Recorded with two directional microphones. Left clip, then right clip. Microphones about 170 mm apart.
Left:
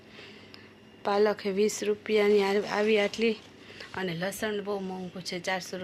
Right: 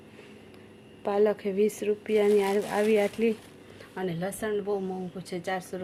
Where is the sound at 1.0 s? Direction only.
5° right (ahead or behind).